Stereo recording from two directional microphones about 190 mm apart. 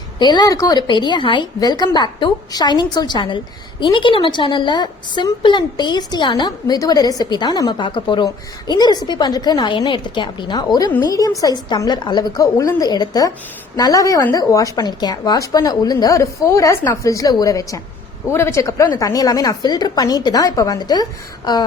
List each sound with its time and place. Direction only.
0.2 s a woman's voice: 20° left (ahead or behind)